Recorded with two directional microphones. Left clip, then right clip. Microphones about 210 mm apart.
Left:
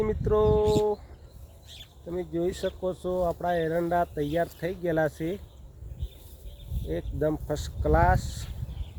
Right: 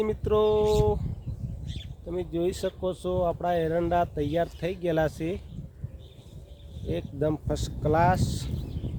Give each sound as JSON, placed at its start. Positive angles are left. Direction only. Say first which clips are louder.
{"t": 0.0, "sound": "speech", "louder": "even", "side_deg": 0}
{"t": 0.6, "sound": "speech", "louder": "even", "side_deg": -20}
{"t": 2.0, "sound": "speech", "louder": "right 1 dB", "side_deg": -5}
{"t": 6.8, "sound": "speech", "louder": "even", "side_deg": 0}